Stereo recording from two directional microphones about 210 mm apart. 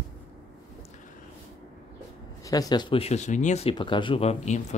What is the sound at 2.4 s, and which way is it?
Speech, 15° left (ahead or behind).